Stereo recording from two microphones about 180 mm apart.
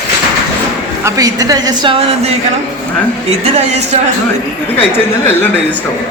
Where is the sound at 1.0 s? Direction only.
20° right (ahead or behind).